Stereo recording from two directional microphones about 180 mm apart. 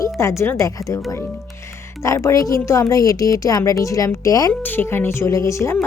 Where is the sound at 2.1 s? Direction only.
15° left (ahead or behind).